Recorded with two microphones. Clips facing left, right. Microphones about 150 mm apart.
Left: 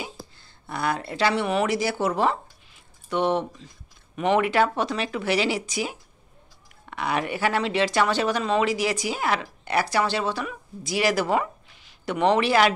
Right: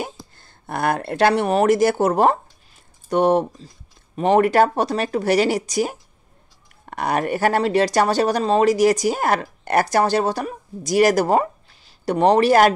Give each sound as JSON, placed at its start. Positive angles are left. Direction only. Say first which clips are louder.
{"t": 0.0, "sound": "speech", "louder": "right 6 dB", "side_deg": -50}